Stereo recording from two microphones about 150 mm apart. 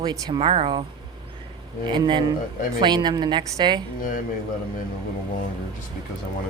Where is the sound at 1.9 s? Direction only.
30° right (ahead or behind).